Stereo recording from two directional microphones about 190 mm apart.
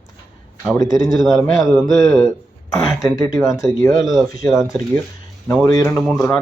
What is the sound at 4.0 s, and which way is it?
Speech, centre (ahead or behind).